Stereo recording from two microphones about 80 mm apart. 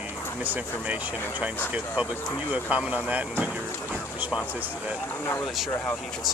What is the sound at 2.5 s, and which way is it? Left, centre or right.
Speech, centre.